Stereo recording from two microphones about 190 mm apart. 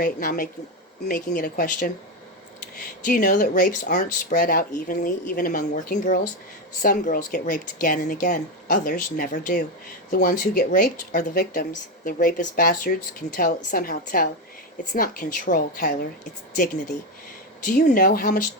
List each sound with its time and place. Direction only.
0.0 s speech: 45° left (ahead or behind)
2.7 s speech: 50° left (ahead or behind)
17.7 s speech: 45° left (ahead or behind)